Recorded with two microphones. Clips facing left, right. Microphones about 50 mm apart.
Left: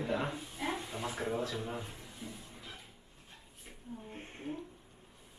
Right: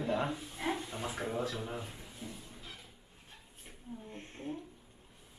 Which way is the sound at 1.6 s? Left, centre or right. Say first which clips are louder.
Even; centre.